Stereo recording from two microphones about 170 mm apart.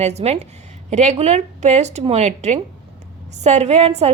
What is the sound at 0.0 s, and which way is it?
A woman's voice, 40° right (ahead or behind).